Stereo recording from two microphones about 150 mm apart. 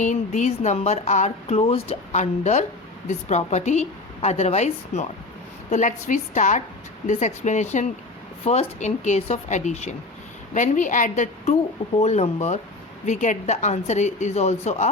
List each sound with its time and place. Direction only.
0.0 s a woman's voice: 55° left (ahead or behind)